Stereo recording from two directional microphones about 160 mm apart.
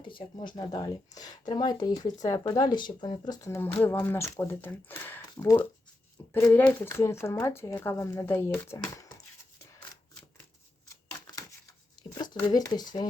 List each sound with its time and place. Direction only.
0.1 s a woman's voice: 30° left (ahead or behind)
10.8 s a sound: 20° left (ahead or behind)
12.1 s speech: 25° left (ahead or behind)